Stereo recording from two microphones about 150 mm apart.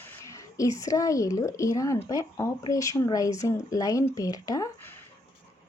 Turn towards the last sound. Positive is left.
turn(degrees=25)  # may be behind; listen again after turning